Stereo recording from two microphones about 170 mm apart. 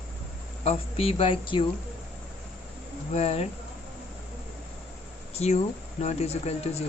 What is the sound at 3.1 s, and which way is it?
Speech, 40° left (ahead or behind).